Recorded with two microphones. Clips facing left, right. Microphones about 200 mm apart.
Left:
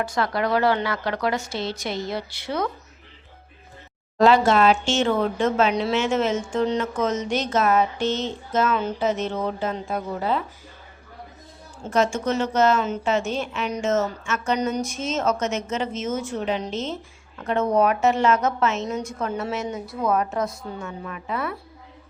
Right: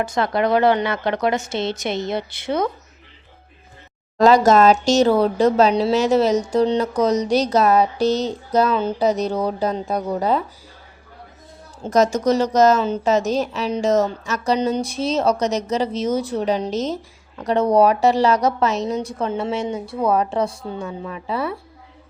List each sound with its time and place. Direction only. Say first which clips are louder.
0.0 s a woman's voice: right 4 dB; 20° right (ahead or behind)
4.2 s a woman's voice: right 4 dB; 40° right (ahead or behind)
11.8 s a woman's voice: right 5 dB; 40° right (ahead or behind)